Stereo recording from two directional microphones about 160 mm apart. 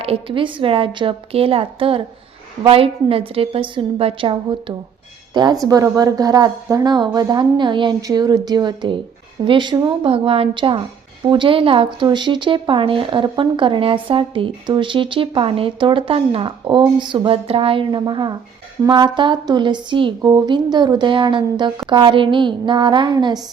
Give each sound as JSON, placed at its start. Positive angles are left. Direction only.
{"t": 0.0, "sound": "speech", "side_deg": -35}